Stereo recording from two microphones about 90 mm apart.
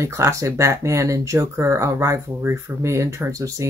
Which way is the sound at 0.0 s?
35° right (ahead or behind).